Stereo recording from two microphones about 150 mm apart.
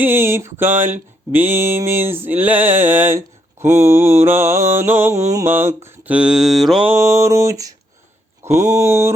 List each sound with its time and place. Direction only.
0.0 s mantra: 15° right (ahead or behind)
6.8 s a sound: 15° right (ahead or behind)
8.4 s mantra: 20° right (ahead or behind)